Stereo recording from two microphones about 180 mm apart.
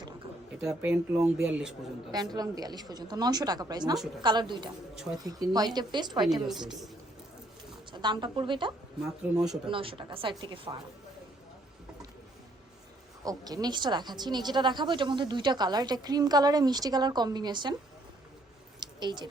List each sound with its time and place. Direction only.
0.7 s speech: 5° right (ahead or behind)
2.1 s speech: 20° right (ahead or behind)
6.2 s speech: centre (ahead or behind)
7.9 s speech: 25° right (ahead or behind)
9.0 s speech: 5° right (ahead or behind)
9.6 s speech: 30° right (ahead or behind)
13.2 s speech: 20° right (ahead or behind)
18.8 s a sound: 25° right (ahead or behind)